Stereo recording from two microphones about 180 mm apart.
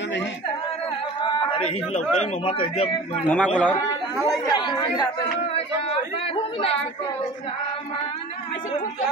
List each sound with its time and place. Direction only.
2.1 s a man's voice: 30° left (ahead or behind)
3.3 s speech: 5° left (ahead or behind)
4.5 s speech: 25° left (ahead or behind)
6.3 s a man's voice: 35° left (ahead or behind)